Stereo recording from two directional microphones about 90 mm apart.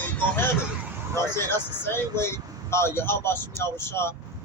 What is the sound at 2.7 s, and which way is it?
A man's voice, 25° left (ahead or behind).